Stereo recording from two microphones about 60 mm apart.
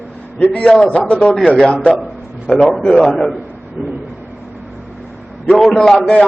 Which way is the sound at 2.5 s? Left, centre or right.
Centre.